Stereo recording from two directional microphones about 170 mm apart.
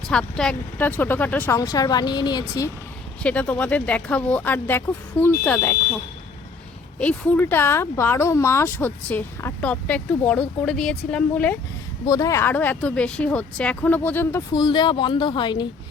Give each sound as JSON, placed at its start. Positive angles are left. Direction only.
{"t": 0.1, "sound": "speech", "side_deg": 5}
{"t": 3.2, "sound": "speech", "side_deg": 10}
{"t": 7.0, "sound": "speech", "side_deg": 10}
{"t": 12.0, "sound": "speech", "side_deg": 20}
{"t": 14.5, "sound": "speech", "side_deg": 25}